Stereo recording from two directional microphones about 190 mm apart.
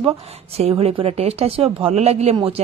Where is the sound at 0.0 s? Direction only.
30° right (ahead or behind).